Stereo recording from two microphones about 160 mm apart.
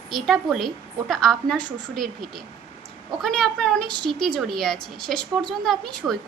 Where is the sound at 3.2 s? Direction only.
5° left (ahead or behind).